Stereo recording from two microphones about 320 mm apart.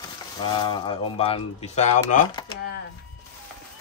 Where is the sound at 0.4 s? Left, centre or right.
Centre.